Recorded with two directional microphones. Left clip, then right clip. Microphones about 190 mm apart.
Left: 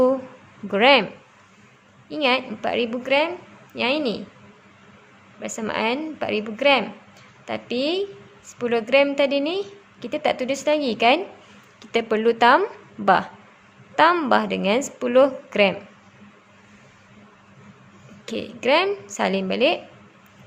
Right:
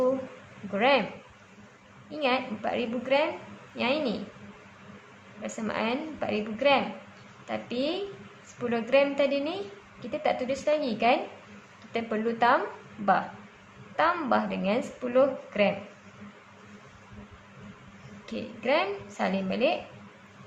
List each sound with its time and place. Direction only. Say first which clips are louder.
0.7 s a woman's voice: left 8 dB; 60° left (ahead or behind)
2.0 s a woman's voice: left 6 dB; 55° left (ahead or behind)
5.4 s a woman's voice: left 6 dB; 55° left (ahead or behind)
13.9 s a woman's voice: left 8 dB; 60° left (ahead or behind)
18.3 s a woman's voice: left 7 dB; 60° left (ahead or behind)